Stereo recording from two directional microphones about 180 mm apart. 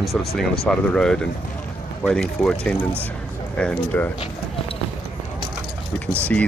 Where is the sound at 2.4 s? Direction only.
10° left (ahead or behind).